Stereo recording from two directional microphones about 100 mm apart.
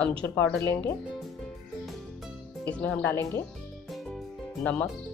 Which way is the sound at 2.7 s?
15° left (ahead or behind).